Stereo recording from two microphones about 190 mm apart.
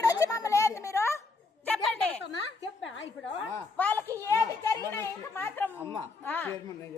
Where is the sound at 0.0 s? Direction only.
20° left (ahead or behind).